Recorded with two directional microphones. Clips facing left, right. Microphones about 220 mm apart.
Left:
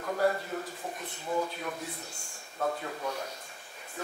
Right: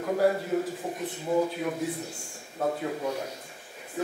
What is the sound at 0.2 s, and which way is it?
A man's voice, 10° right (ahead or behind).